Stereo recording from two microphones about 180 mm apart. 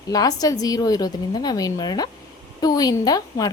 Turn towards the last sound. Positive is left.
turn(degrees=20)  # may be behind; listen again after turning